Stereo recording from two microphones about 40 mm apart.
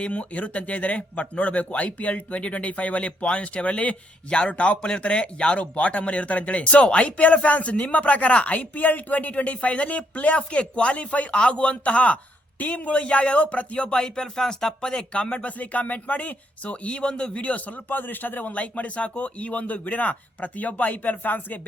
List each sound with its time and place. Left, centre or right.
0.0 s a man's voice: left
8.7 s a man's voice: left
14.0 s a man's voice: centre; by 17.7 s left
17.8 s a man's voice: left